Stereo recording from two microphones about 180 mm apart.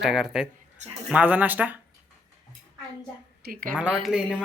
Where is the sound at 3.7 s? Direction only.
5° right (ahead or behind).